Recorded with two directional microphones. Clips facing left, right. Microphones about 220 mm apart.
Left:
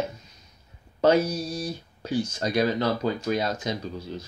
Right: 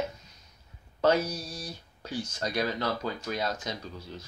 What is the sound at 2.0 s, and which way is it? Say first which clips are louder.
Speech: left 7 dB; 15° left (ahead or behind).